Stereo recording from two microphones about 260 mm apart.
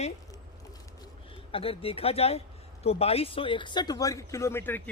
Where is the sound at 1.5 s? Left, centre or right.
Left.